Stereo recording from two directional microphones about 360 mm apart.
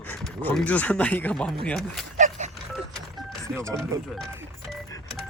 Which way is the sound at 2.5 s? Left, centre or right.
Centre.